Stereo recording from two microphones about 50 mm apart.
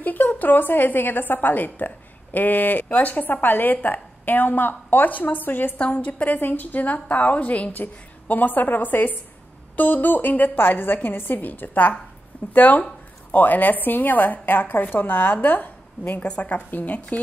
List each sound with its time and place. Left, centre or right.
0.0 s a woman's voice: left
5.8 s a woman's voice: left